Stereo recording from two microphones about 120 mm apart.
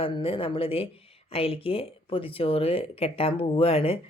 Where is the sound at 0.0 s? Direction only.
50° left (ahead or behind).